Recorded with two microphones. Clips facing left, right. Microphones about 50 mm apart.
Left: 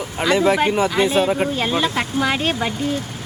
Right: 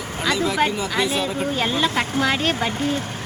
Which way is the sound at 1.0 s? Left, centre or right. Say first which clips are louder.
Left 4 dB; left.